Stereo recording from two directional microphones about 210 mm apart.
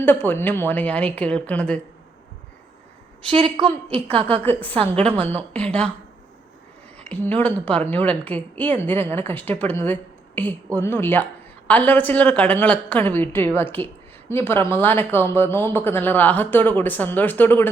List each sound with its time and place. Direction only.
0.0 s a woman's voice: 10° left (ahead or behind)
3.2 s a woman's voice: 25° right (ahead or behind)
4.4 s a woman's voice: 10° left (ahead or behind)
4.8 s a woman's voice: 30° right (ahead or behind)
5.1 s a woman's voice: 5° left (ahead or behind)
7.0 s a woman's voice: 5° left (ahead or behind)